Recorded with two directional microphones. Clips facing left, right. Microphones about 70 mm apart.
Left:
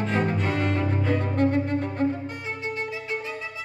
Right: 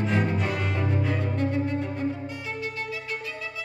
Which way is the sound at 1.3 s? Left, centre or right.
Left.